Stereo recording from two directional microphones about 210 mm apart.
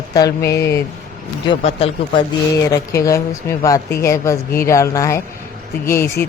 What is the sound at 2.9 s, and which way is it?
Speech, 15° left (ahead or behind).